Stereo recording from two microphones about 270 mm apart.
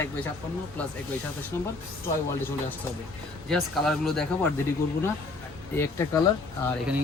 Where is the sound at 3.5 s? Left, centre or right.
Centre.